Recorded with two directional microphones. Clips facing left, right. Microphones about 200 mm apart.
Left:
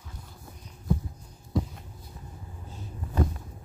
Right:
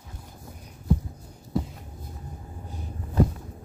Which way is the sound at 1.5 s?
5° right (ahead or behind).